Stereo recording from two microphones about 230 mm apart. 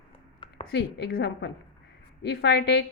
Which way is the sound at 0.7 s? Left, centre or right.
Left.